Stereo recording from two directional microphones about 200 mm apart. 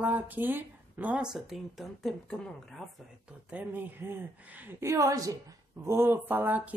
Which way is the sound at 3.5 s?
10° right (ahead or behind).